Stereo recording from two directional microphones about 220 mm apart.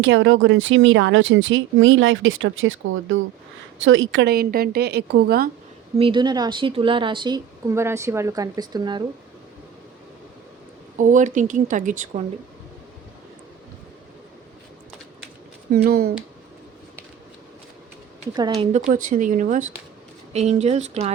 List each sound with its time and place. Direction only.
0.0 s a woman's voice: 55° right (ahead or behind)
6.0 s a woman's voice: 20° right (ahead or behind)
10.9 s speech: 35° right (ahead or behind)
15.8 s speech: 40° right (ahead or behind)
18.3 s a woman's voice: 20° right (ahead or behind)
19.0 s a woman's voice: 35° right (ahead or behind)